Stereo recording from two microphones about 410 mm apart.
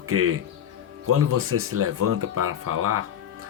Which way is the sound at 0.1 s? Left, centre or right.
Right.